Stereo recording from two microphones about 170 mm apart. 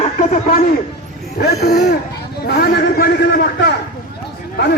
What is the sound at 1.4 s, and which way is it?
A man's voice, 75° left (ahead or behind).